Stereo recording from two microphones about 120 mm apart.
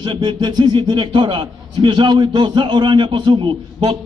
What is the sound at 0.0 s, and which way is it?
A man's voice, 40° right (ahead or behind).